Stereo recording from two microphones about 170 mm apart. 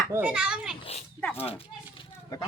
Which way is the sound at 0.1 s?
10° right (ahead or behind).